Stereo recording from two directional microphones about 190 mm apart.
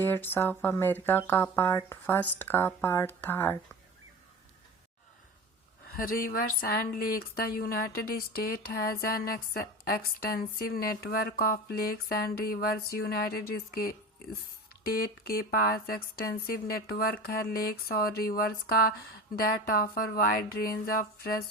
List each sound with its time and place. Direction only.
0.0 s speech: 10° left (ahead or behind)
5.8 s speech: 50° left (ahead or behind)